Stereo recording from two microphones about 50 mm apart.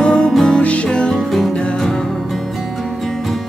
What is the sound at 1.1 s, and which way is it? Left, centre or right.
Music, centre.